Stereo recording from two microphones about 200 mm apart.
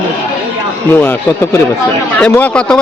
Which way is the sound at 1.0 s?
10° left (ahead or behind).